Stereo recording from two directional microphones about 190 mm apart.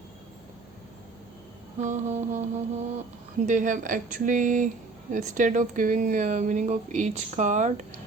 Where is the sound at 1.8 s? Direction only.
40° right (ahead or behind).